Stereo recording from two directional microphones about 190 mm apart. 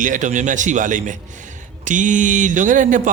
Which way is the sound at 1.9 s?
40° right (ahead or behind).